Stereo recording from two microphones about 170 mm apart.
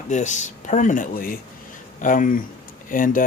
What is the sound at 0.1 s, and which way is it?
Speech, 45° left (ahead or behind).